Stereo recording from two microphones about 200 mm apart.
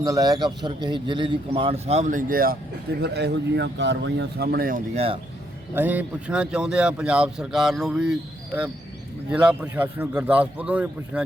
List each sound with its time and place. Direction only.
0.0 s a man's voice: 15° right (ahead or behind); by 4.8 s 45° right (ahead or behind)
4.9 s a man's voice: 30° right (ahead or behind)
5.7 s a man's voice: 10° right (ahead or behind)